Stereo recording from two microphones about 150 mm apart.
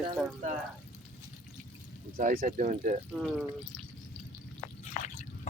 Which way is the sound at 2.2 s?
60° right (ahead or behind).